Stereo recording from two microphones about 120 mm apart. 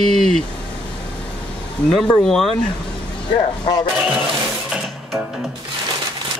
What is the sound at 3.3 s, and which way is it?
Speech, 40° left (ahead or behind).